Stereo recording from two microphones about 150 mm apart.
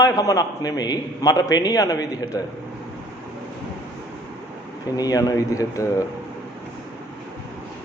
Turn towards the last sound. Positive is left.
turn(degrees=20)  # may be behind; listen again after turning